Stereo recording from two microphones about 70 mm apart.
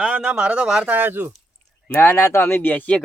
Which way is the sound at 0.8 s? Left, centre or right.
Right.